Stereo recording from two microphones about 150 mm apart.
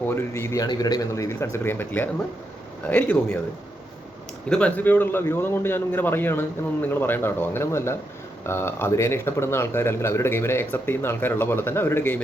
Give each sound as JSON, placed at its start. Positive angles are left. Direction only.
{"t": 0.1, "sound": "speech", "side_deg": 15}
{"t": 4.4, "sound": "speech", "side_deg": 5}